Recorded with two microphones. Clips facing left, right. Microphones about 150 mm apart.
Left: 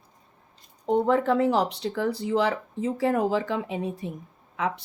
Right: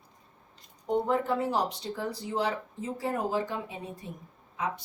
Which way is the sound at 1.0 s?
90° left.